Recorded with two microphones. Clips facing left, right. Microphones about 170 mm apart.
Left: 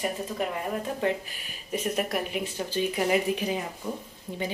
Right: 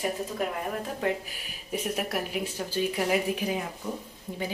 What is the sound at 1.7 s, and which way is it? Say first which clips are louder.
Speech: left 2 dB; 10° right (ahead or behind).